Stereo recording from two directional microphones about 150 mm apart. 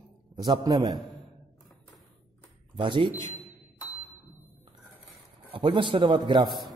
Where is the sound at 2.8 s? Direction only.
30° right (ahead or behind).